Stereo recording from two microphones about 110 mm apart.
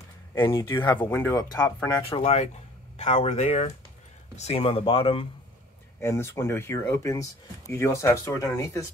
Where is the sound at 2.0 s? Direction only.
60° left (ahead or behind).